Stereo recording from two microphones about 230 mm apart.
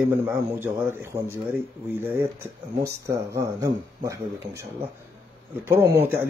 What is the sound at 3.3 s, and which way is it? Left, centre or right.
Speech, centre.